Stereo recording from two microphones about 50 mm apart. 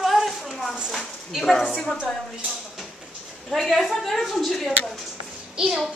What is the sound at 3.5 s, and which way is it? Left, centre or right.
A woman's voice, centre.